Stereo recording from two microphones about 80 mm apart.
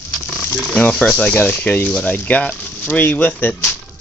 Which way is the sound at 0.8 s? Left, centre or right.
Centre.